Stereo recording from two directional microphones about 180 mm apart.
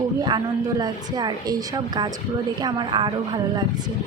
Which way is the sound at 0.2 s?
20° right (ahead or behind).